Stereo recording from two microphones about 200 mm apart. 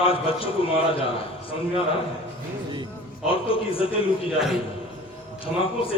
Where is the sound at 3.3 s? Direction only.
25° left (ahead or behind).